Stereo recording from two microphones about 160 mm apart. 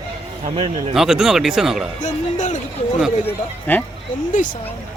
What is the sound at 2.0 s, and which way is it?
Speech, 50° left (ahead or behind).